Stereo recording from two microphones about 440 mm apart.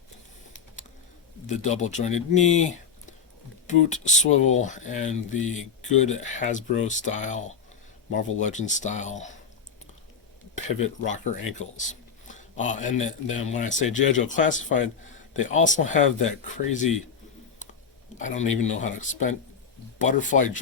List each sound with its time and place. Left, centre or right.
1.5 s speech: centre
10.7 s speech: centre
18.2 s speech: centre